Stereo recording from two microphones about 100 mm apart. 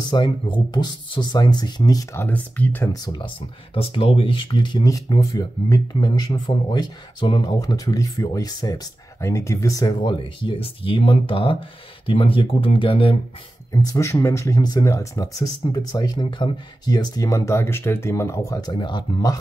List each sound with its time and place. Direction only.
0.0 s speech: 45° left (ahead or behind)
2.1 s speech: 15° left (ahead or behind)
2.9 s speech: 45° left (ahead or behind)
3.7 s speech: 70° left (ahead or behind); by 4.8 s 50° left (ahead or behind)
4.8 s speech: 35° left (ahead or behind); by 7.5 s 55° left (ahead or behind)
7.6 s speech: 35° left (ahead or behind)
9.2 s speech: 30° left (ahead or behind)
9.9 s speech: 50° left (ahead or behind)
14.2 s speech: 30° left (ahead or behind)
18.7 s speech: 50° left (ahead or behind)